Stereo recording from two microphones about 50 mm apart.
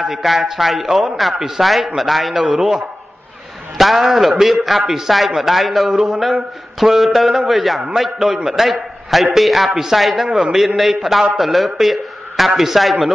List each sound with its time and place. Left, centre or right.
0.1 s a man's voice: centre
2.4 s speech: centre
3.7 s a man's voice: centre
10.2 s speech: centre
10.8 s a man's voice: centre